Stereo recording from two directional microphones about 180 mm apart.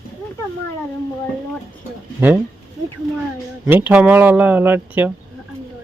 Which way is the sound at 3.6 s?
10° right (ahead or behind).